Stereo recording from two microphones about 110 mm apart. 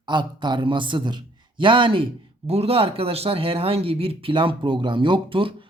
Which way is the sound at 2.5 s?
65° right (ahead or behind).